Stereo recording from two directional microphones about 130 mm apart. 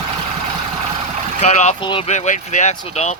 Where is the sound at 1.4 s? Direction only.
65° left (ahead or behind).